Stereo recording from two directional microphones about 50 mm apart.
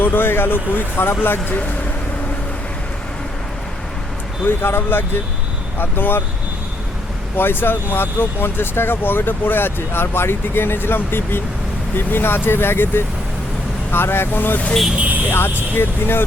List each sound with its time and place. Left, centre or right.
0.0 s speech: left
4.4 s speech: left
7.3 s speech: left
14.9 s speech: right
15.3 s speech: left